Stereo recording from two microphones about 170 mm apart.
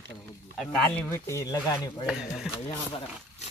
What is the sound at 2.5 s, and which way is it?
Speech, 35° left (ahead or behind).